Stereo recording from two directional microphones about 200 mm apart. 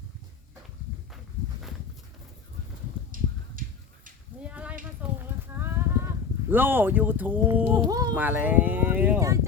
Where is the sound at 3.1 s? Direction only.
45° right (ahead or behind).